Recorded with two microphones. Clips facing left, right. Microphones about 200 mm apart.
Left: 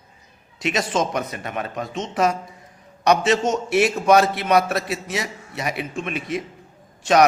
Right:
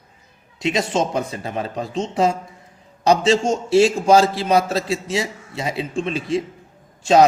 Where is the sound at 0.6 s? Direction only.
25° right (ahead or behind).